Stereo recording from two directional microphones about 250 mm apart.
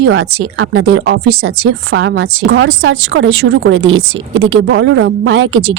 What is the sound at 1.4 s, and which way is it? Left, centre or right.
A woman's voice, right.